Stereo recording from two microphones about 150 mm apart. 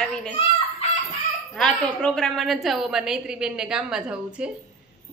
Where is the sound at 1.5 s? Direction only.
5° left (ahead or behind).